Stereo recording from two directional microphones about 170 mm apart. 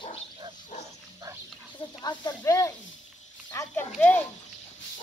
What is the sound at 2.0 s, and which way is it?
Snake, 25° left (ahead or behind).